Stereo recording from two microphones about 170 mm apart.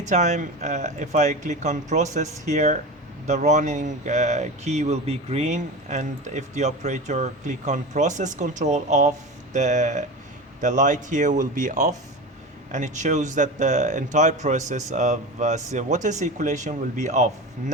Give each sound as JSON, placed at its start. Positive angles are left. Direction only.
{"t": 0.0, "sound": "speech", "side_deg": -45}